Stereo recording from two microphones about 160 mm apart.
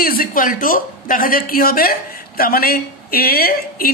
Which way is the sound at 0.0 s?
65° left (ahead or behind).